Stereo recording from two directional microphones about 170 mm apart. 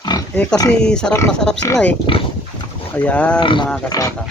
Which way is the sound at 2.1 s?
30° left (ahead or behind).